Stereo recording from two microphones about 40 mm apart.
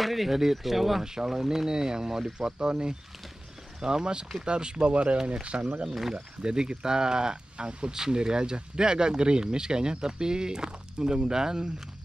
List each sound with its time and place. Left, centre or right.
0.0 s speech: centre; by 5.7 s right
5.9 s speech: centre
6.4 s speech: right